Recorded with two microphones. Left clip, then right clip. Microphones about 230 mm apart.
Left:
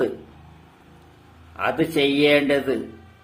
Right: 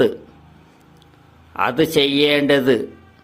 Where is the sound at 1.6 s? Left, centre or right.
Right.